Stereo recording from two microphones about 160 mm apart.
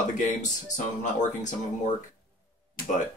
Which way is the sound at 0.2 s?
50° left (ahead or behind).